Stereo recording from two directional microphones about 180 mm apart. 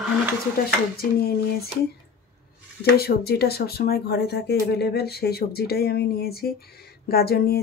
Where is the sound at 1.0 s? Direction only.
60° left (ahead or behind).